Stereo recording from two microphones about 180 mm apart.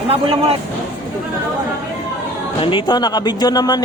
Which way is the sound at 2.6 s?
25° left (ahead or behind).